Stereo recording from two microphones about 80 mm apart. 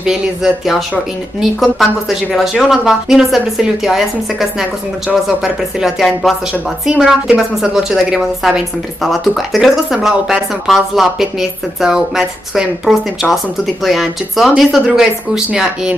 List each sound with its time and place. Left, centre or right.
0.0 s a woman's voice: centre